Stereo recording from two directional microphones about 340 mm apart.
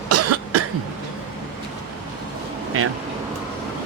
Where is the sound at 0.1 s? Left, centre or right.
Right.